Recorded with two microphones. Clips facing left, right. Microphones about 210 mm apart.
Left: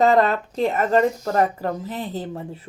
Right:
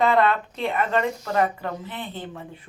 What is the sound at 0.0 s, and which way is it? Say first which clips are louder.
Speech: left 3 dB; 40° left (ahead or behind).